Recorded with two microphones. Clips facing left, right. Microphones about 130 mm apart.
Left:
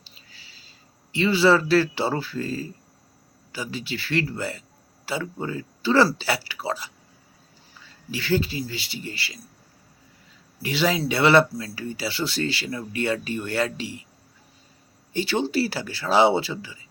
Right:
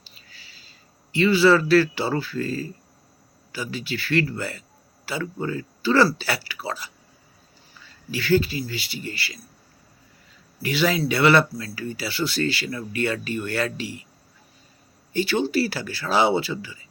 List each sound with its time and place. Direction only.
0.1 s a sound: 25° left (ahead or behind)
1.1 s speech: 25° left (ahead or behind)
8.1 s speech: 25° left (ahead or behind)
10.6 s speech: 25° left (ahead or behind)
15.1 s speech: 25° left (ahead or behind)